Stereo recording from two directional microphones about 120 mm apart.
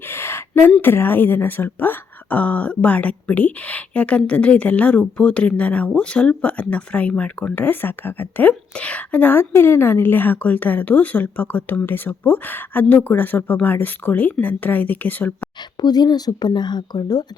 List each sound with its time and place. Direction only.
0.0 s a sound: 20° left (ahead or behind)
0.8 s speech: 20° left (ahead or behind)
15.8 s speech: 35° left (ahead or behind)